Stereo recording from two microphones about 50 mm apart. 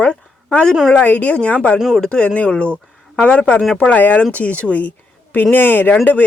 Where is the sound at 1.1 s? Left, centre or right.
Left.